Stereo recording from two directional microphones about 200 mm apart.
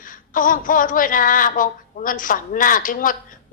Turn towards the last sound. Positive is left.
turn(degrees=45)  # may be behind; listen again after turning